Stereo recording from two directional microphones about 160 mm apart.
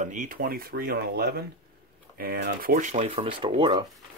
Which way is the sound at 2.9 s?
45° right (ahead or behind).